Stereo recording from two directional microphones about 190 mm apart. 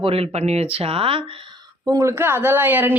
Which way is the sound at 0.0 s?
30° right (ahead or behind).